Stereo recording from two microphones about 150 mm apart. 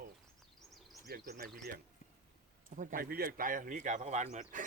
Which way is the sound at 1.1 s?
90° right.